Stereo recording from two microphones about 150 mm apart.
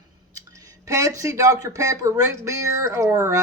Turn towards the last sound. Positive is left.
turn(degrees=-20)  # may be behind; listen again after turning